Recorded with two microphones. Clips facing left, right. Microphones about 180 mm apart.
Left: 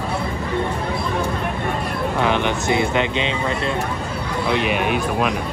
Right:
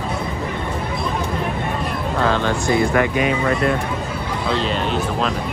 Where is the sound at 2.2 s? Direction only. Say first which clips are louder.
Right 1 dB; 20° left (ahead or behind).